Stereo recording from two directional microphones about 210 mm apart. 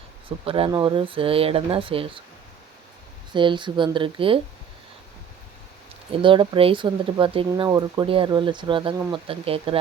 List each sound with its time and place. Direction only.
0.3 s speech: 25° right (ahead or behind)
3.3 s speech: 20° right (ahead or behind)
6.1 s speech: 25° right (ahead or behind)